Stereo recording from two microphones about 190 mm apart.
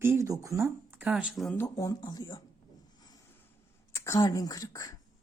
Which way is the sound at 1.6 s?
20° left (ahead or behind).